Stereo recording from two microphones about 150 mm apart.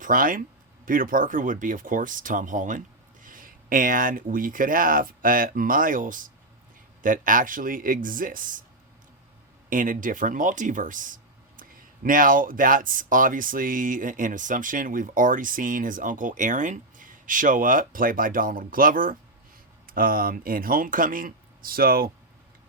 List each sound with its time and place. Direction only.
0.0 s speech: 65° right (ahead or behind)
9.6 s speech: 65° right (ahead or behind)